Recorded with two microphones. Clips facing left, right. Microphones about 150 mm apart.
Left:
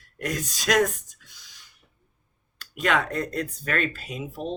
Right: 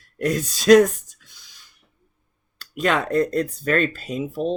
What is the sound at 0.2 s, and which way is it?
Speech, 30° right (ahead or behind).